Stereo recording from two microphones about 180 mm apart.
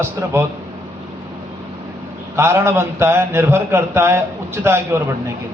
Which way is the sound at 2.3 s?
15° right (ahead or behind).